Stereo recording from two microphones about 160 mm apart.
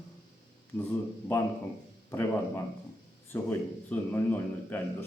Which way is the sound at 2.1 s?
15° left (ahead or behind).